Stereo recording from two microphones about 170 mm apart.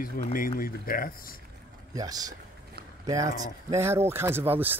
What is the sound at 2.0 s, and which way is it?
Speech, 20° right (ahead or behind).